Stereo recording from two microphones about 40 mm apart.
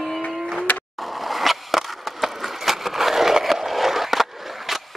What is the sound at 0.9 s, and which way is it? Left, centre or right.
Skateboard, centre.